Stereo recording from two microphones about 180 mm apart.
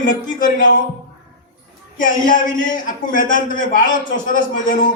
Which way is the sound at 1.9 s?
45° left (ahead or behind).